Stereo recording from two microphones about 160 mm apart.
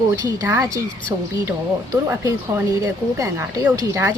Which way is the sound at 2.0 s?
20° right (ahead or behind).